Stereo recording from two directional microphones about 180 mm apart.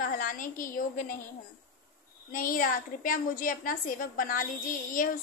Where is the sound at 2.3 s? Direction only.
50° left (ahead or behind).